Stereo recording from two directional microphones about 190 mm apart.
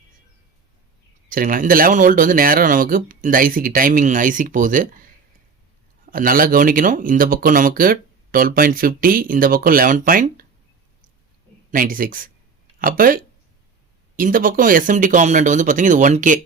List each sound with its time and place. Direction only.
1.3 s speech: 45° right (ahead or behind)
6.1 s speech: 50° right (ahead or behind)
11.7 s speech: 45° right (ahead or behind)
14.2 s speech: 45° right (ahead or behind)